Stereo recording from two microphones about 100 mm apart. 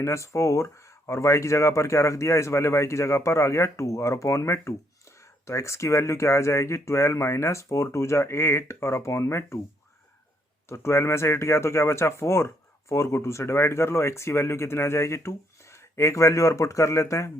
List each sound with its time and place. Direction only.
0.0 s speech: 30° left (ahead or behind)
10.7 s speech: 30° left (ahead or behind)